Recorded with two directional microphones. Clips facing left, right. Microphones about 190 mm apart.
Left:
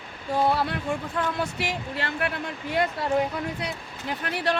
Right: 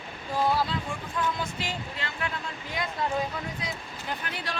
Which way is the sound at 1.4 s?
70° left (ahead or behind).